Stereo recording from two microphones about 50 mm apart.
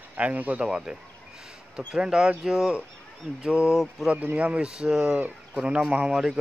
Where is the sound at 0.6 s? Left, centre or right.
Centre.